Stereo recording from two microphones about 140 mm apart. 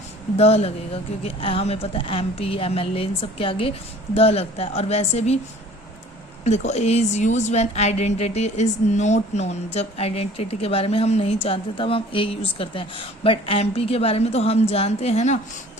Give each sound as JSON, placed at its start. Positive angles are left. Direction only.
{"t": 0.3, "sound": "a woman's voice", "side_deg": 45}
{"t": 6.4, "sound": "a woman's voice", "side_deg": 55}